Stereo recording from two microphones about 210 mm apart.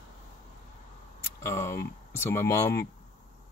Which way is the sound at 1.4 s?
15° left (ahead or behind).